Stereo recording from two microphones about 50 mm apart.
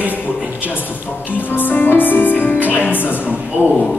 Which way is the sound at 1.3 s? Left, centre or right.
Left.